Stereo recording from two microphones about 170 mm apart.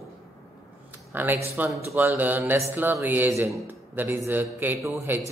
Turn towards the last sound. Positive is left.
turn(degrees=-15)  # may be behind; listen again after turning